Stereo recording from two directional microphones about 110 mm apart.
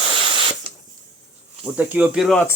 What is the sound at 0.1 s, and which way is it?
Spray, 50° right (ahead or behind).